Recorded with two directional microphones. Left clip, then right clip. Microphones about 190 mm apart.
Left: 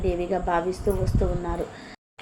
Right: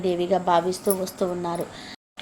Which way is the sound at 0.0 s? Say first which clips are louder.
Right 3 dB; 20° right (ahead or behind).